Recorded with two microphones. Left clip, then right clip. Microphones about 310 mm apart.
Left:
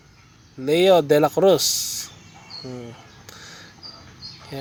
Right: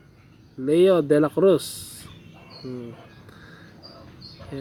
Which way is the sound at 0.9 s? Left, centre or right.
Centre.